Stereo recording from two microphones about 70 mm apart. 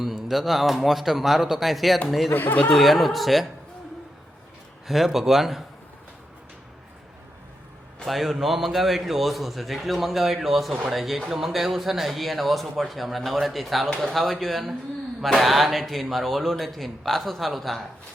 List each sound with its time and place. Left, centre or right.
0.0 s speech: centre
2.3 s speech: left
2.6 s speech: centre
4.9 s speech: centre
8.0 s speech: centre